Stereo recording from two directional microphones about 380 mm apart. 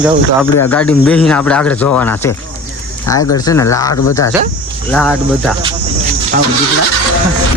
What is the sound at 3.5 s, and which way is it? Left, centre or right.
Speech, centre.